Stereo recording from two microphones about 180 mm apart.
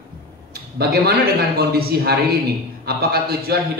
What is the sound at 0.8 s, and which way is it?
A man's voice, 60° right (ahead or behind).